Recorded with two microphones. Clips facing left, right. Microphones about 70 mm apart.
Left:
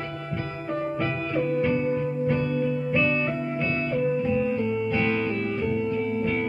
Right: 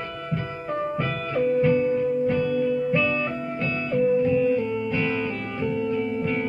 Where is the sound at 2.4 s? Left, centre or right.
Centre.